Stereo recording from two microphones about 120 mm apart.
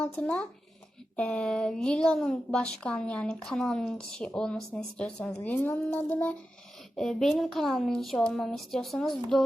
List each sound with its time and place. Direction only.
0.0 s a woman's voice: 10° left (ahead or behind)
6.9 s speech: 5° left (ahead or behind)